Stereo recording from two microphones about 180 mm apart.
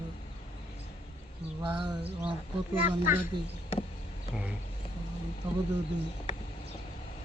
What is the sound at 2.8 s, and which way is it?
Speech, 45° left (ahead or behind).